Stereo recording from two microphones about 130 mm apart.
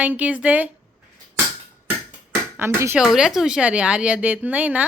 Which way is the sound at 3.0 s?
5° right (ahead or behind).